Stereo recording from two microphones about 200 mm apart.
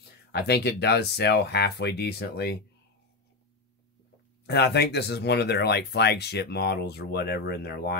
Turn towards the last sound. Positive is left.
turn(degrees=50)  # may be behind; listen again after turning